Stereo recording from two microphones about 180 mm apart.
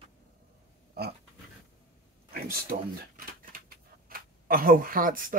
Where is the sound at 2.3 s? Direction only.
55° right (ahead or behind).